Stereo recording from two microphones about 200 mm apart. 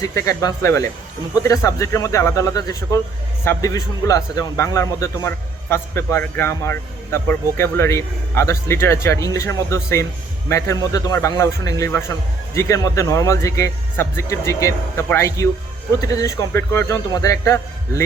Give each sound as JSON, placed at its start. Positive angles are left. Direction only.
{"t": 0.0, "sound": "a man's voice", "side_deg": 15}